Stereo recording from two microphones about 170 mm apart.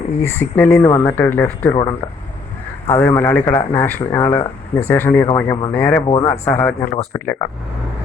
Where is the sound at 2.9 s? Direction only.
15° left (ahead or behind).